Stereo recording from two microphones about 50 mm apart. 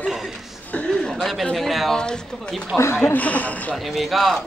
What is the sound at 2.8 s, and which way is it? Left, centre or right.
Speech, left.